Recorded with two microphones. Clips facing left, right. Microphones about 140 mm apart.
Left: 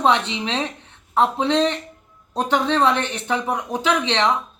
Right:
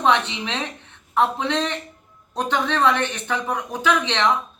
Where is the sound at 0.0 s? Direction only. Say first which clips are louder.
Left 1 dB; 30° left (ahead or behind).